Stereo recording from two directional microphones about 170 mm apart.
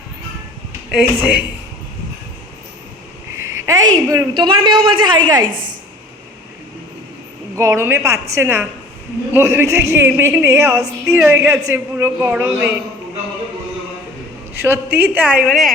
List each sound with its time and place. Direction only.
0.9 s a man's voice: 5° right (ahead or behind)
3.3 s a man's voice: 15° right (ahead or behind)
5.5 s a woman's voice: 55° right (ahead or behind)
7.5 s a man's voice: 15° right (ahead or behind)
14.5 s a man's voice: 15° right (ahead or behind)